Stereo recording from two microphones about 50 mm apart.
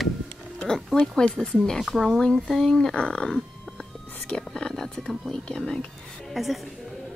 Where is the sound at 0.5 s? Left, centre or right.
Centre.